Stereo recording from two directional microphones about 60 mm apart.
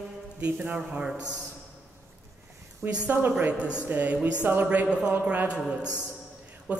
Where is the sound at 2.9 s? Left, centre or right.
Right.